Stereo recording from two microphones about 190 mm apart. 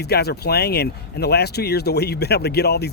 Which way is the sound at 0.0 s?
60° left (ahead or behind).